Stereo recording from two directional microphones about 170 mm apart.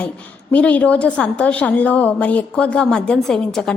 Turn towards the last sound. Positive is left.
turn(degrees=5)  # may be behind; listen again after turning